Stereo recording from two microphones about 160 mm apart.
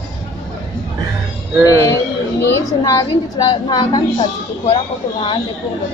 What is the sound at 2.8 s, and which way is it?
A woman's voice, 20° left (ahead or behind).